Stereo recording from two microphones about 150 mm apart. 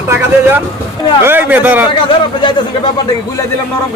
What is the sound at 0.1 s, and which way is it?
Speech, 15° right (ahead or behind).